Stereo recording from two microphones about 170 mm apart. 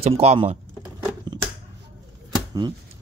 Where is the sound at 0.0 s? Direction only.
35° right (ahead or behind).